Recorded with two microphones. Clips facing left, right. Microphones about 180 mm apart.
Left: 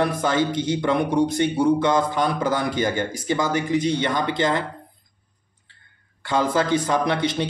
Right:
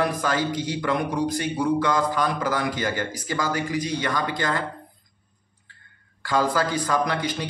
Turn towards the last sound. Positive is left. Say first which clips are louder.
# left 3 dB
turn(degrees=25)  # may be behind; listen again after turning